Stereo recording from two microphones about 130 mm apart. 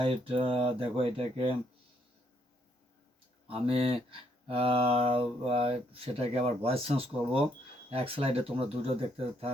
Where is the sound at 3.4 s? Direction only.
45° right (ahead or behind).